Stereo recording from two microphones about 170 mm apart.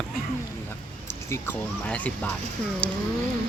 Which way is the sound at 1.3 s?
10° left (ahead or behind).